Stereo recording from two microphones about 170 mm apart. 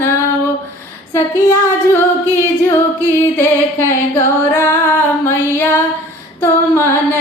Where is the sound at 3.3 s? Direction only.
15° left (ahead or behind).